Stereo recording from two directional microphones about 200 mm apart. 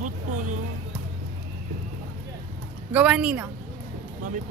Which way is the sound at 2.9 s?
5° right (ahead or behind).